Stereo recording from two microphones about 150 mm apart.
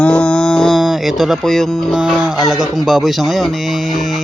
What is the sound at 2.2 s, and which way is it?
Speech, 5° right (ahead or behind).